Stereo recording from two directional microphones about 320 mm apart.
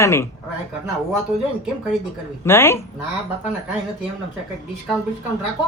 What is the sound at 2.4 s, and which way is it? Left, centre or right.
Speech, centre.